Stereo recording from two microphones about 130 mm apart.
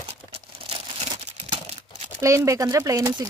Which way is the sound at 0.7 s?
45° right (ahead or behind).